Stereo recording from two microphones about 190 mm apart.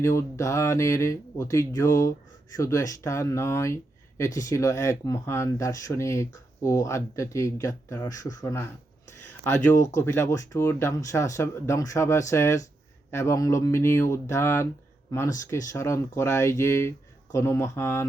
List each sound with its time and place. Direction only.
0.0 s speech: 15° left (ahead or behind)